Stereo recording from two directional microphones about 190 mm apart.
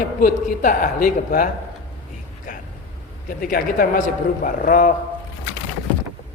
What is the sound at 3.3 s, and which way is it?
A woman's voice, 50° left (ahead or behind).